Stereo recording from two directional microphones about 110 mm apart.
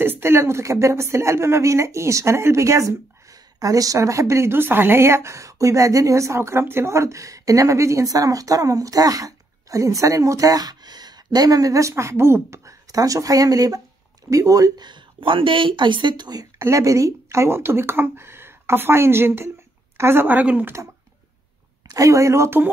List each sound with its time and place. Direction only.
0.0 s a woman's voice: 20° right (ahead or behind); by 16.4 s 40° right (ahead or behind)
16.5 s a woman's voice: 25° right (ahead or behind)
21.8 s speech: 30° right (ahead or behind)